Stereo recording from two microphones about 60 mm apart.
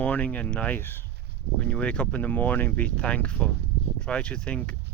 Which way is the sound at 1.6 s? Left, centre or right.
Left.